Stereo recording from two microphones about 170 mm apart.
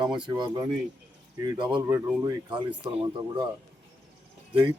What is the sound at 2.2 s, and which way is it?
Speech, 25° right (ahead or behind).